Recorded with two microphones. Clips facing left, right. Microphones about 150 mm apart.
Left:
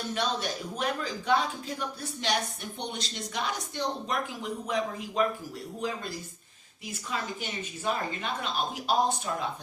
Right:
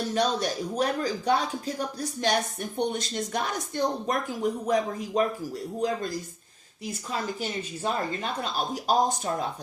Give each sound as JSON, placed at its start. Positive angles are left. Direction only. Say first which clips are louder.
{"t": 0.1, "sound": "speech", "louder": "right 4 dB", "side_deg": -40}
{"t": 8.2, "sound": "speech", "louder": "right 2 dB", "side_deg": -40}